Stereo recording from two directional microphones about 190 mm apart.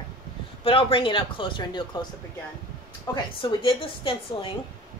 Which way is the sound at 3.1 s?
30° left (ahead or behind).